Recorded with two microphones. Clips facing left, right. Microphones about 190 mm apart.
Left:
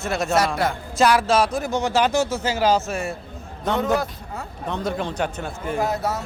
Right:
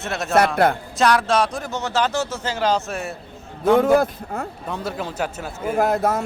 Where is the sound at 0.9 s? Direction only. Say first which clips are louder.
Left 2 dB; centre (ahead or behind).